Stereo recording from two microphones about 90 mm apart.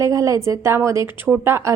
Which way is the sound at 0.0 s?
35° right (ahead or behind).